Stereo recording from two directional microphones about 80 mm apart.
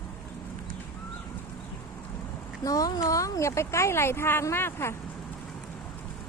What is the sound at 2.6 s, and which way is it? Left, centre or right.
Speech, left.